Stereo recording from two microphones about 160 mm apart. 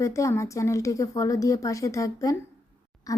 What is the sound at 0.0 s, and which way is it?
Speech, 20° left (ahead or behind).